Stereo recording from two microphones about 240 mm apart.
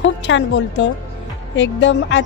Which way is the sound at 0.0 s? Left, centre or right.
Left.